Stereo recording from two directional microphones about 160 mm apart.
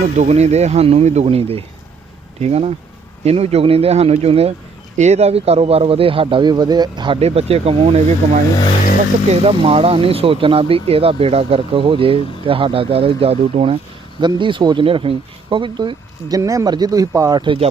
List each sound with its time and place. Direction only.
0.2 s speech: 45° right (ahead or behind)